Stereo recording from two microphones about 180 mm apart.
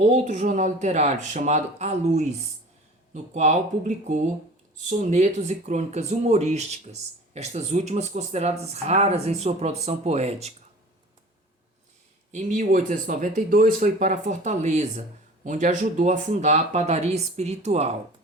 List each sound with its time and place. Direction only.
0.0 s speech: 45° right (ahead or behind)
12.3 s speech: 40° right (ahead or behind)